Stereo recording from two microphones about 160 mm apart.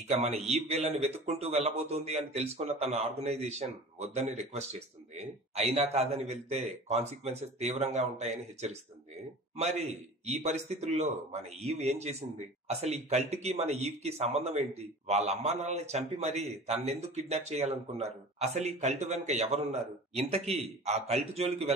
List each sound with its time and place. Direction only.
0.2 s a man's voice: 40° right (ahead or behind)